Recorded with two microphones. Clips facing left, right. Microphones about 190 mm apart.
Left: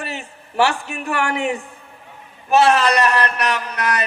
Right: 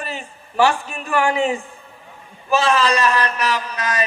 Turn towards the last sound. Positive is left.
turn(degrees=65)  # may be behind; listen again after turning